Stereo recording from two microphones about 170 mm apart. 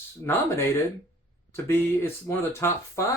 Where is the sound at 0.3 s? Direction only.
15° left (ahead or behind).